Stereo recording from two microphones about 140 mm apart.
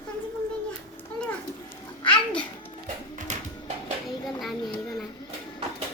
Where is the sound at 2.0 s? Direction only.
10° left (ahead or behind).